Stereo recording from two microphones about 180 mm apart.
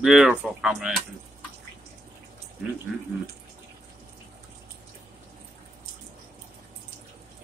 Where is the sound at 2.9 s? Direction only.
Centre (ahead or behind).